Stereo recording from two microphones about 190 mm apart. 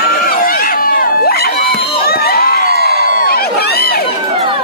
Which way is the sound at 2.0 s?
55° left (ahead or behind).